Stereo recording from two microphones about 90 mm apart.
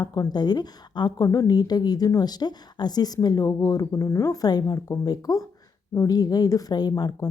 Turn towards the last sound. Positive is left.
turn(degrees=50)  # may be behind; listen again after turning